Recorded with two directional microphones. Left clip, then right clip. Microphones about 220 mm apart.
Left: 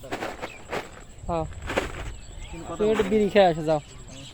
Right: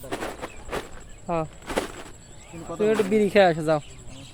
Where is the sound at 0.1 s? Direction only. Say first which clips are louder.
Even; 30° right (ahead or behind).